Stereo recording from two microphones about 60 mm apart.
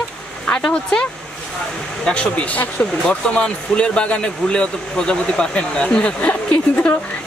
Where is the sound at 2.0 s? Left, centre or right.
Centre.